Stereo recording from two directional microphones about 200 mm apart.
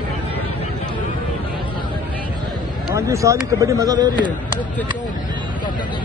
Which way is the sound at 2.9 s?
15° right (ahead or behind).